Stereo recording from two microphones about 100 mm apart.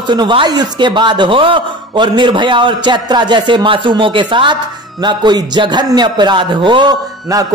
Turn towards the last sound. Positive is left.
turn(degrees=-35)  # may be behind; listen again after turning